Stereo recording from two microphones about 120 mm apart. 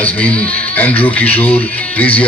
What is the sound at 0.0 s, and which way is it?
Speech, 10° left (ahead or behind).